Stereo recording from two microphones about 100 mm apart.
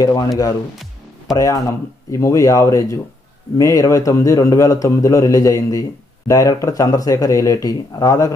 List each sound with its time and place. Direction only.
0.0 s a man's voice: 40° left (ahead or behind)
1.3 s a man's voice: 35° left (ahead or behind)